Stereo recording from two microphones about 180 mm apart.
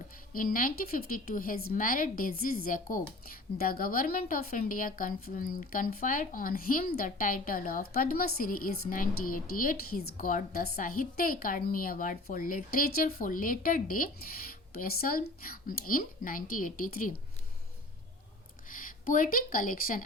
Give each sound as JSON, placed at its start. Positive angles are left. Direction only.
{"t": 0.3, "sound": "a woman's voice", "side_deg": 50}
{"t": 18.7, "sound": "speech", "side_deg": 50}